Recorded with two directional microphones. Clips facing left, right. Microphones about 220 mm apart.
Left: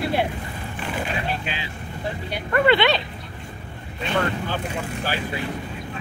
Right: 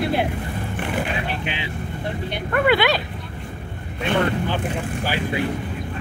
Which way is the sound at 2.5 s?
5° right (ahead or behind).